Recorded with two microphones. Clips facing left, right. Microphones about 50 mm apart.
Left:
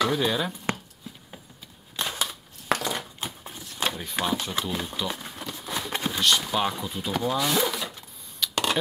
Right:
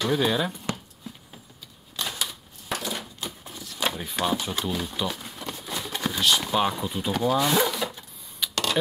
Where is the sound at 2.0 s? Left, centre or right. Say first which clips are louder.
Left 1 dB; left.